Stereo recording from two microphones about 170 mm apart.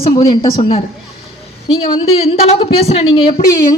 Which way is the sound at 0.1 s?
25° left (ahead or behind).